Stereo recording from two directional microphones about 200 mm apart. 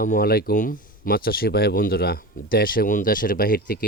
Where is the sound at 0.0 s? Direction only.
45° left (ahead or behind).